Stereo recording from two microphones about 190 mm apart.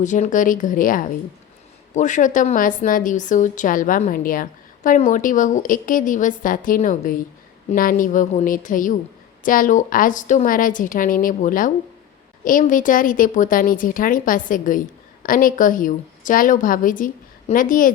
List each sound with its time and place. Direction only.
0.0 s a woman's voice: 40° left (ahead or behind)